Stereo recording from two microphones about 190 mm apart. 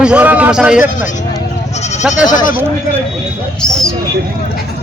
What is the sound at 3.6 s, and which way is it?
Speech, centre (ahead or behind).